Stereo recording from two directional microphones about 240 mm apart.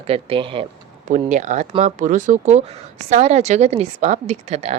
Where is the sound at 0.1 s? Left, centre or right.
Right.